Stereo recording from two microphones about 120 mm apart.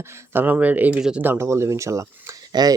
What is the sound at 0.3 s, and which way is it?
Speech, 15° right (ahead or behind).